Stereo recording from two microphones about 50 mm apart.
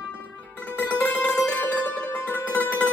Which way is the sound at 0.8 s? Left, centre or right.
Left.